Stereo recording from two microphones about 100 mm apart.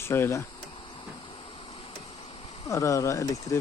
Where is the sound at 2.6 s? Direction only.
30° left (ahead or behind).